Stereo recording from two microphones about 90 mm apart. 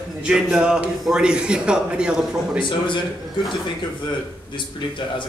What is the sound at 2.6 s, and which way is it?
Speech, 65° left (ahead or behind).